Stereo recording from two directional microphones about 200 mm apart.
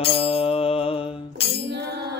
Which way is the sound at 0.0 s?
30° left (ahead or behind).